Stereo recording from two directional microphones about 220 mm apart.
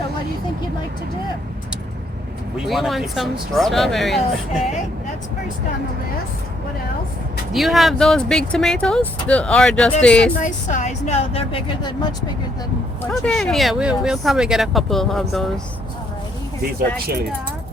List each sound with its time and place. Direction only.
2.6 s speech: centre (ahead or behind)
7.5 s speech: centre (ahead or behind)
10.4 s speech: 35° left (ahead or behind)
13.0 s speech: 5° left (ahead or behind)